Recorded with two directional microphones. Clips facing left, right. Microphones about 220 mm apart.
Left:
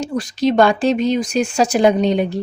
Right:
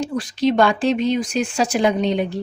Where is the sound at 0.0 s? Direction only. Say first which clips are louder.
Left 1 dB; 40° left (ahead or behind).